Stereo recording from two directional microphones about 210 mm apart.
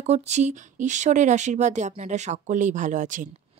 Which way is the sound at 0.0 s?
30° right (ahead or behind).